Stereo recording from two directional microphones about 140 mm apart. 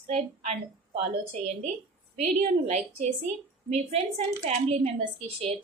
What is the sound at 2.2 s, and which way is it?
A woman's voice, 55° right (ahead or behind).